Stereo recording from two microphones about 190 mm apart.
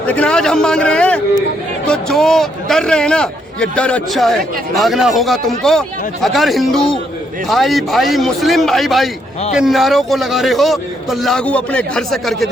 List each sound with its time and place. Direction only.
0.0 s a man's voice: 5° left (ahead or behind)